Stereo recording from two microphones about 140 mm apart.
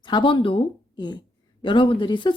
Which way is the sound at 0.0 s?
35° left (ahead or behind).